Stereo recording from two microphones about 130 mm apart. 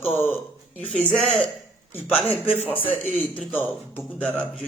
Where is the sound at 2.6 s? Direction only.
10° left (ahead or behind).